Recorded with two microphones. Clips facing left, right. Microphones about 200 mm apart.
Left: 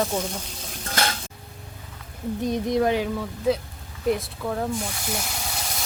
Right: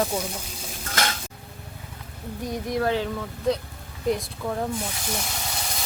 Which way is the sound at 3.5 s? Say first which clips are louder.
Left 1 dB; 5° left (ahead or behind).